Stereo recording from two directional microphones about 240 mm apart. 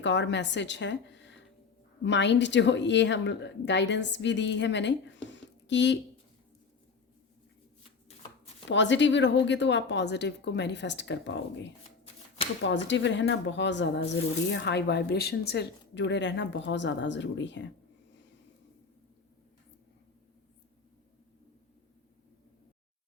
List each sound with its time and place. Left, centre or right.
0.0 s a woman's voice: left
8.7 s a woman's voice: left